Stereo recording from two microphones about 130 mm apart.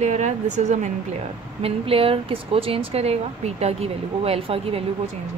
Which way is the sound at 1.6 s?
45° right (ahead or behind).